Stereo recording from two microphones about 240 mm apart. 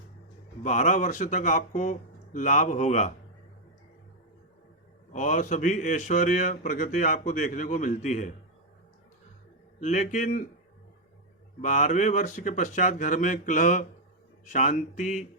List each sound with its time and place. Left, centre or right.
0.6 s a man's voice: left
5.1 s a man's voice: left
9.8 s a man's voice: left
11.6 s a man's voice: left